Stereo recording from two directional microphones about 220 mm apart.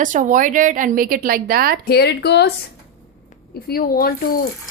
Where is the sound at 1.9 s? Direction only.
50° left (ahead or behind).